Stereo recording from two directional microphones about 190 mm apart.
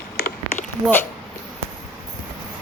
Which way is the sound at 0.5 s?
10° left (ahead or behind).